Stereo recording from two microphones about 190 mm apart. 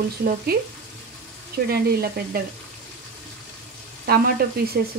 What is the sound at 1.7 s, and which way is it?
Speech, 55° right (ahead or behind).